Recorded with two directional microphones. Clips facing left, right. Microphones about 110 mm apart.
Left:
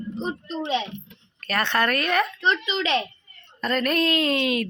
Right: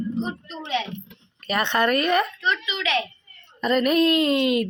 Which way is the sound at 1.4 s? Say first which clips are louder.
Right 2 dB; 15° right (ahead or behind).